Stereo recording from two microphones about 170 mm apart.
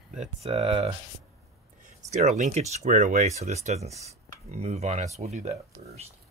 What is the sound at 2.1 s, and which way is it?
Speech, 45° right (ahead or behind).